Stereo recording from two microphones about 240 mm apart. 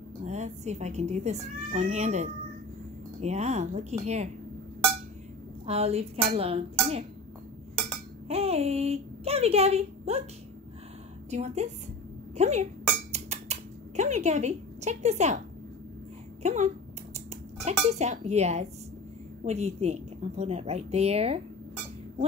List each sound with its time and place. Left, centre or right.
0.2 s speech: right
5.7 s speech: right
8.3 s speech: right
11.2 s speech: right
13.1 s scissors: right
16.4 s speech: right
17.8 s speech: right